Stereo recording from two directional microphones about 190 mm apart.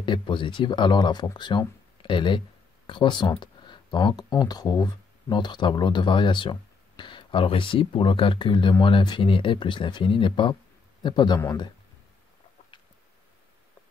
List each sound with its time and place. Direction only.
0.0 s speech: 25° left (ahead or behind)